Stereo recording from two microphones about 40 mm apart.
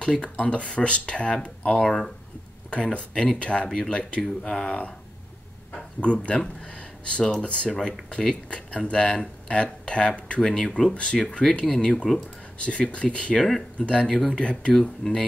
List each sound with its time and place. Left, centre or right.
0.0 s speech: left
1.7 s speech: centre
2.7 s speech: left
3.6 s speech: centre
3.9 s speech: left
5.9 s speech: left
14.7 s speech: centre